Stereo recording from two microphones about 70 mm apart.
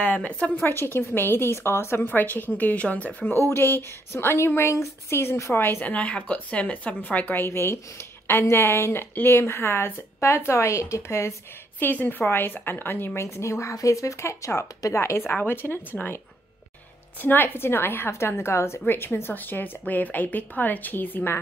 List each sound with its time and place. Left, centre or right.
0.0 s a woman's voice: left
0.7 s speech: left
3.3 s speech: left
11.8 s speech: left
17.2 s a woman's voice: left